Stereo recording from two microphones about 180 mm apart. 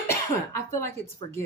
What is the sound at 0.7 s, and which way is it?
Speech, 15° left (ahead or behind).